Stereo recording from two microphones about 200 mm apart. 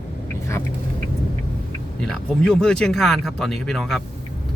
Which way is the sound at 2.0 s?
5° left (ahead or behind).